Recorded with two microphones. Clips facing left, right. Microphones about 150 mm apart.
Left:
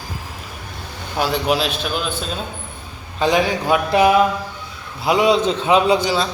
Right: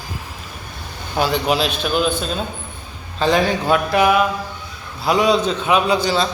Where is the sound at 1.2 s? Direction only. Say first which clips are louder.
Right 1 dB; centre (ahead or behind).